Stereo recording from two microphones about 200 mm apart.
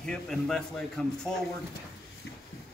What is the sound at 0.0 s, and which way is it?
A man's voice, 5° left (ahead or behind).